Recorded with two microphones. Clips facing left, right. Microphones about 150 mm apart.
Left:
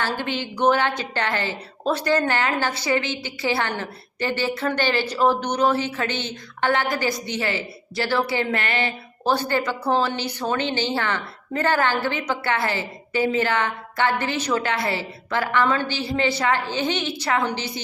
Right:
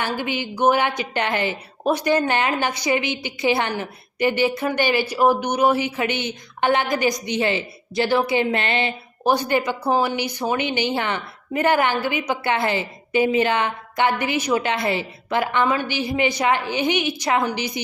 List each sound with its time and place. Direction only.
0.0 s a woman's voice: 10° right (ahead or behind)